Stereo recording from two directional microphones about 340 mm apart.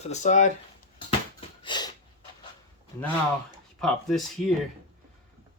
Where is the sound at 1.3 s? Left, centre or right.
Centre.